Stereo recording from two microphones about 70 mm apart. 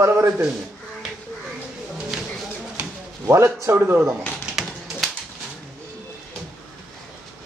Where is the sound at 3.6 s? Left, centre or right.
Right.